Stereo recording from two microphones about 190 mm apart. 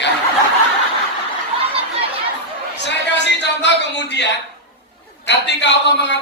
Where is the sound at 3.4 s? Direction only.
65° left (ahead or behind).